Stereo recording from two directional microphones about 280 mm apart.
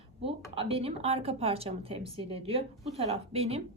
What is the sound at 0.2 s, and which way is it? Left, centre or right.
A woman's voice, centre.